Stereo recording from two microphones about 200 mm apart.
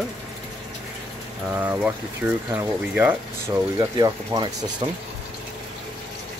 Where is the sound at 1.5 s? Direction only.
10° right (ahead or behind).